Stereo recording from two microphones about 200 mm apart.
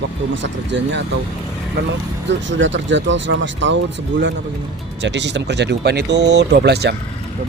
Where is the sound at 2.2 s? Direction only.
65° right (ahead or behind).